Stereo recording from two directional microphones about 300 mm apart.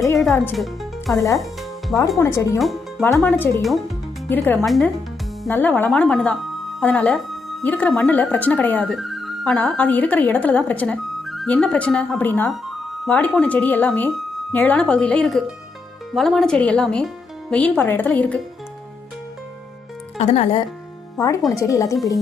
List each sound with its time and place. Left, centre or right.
0.2 s speech: centre
20.1 s speech: left
21.5 s speech: centre